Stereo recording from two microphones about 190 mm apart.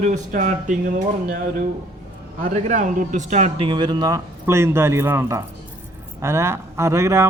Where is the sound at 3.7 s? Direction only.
20° right (ahead or behind).